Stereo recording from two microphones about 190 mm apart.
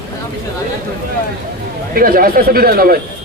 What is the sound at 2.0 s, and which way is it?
Speech, 50° right (ahead or behind).